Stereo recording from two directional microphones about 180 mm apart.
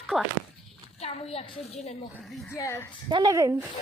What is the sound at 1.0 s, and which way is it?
Speech, 35° left (ahead or behind).